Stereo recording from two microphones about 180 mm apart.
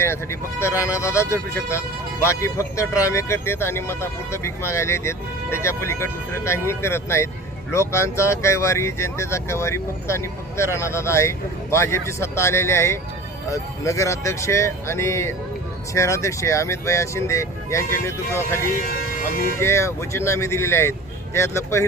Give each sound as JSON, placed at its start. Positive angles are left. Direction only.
{"t": 0.0, "sound": "speech", "side_deg": 15}
{"t": 18.7, "sound": "speech", "side_deg": 55}
{"t": 19.5, "sound": "speech", "side_deg": 15}